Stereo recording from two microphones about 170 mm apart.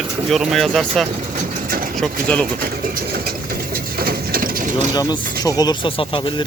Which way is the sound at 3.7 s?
65° right (ahead or behind).